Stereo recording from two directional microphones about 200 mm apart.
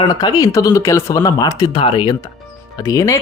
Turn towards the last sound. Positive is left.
turn(degrees=15)  # may be behind; listen again after turning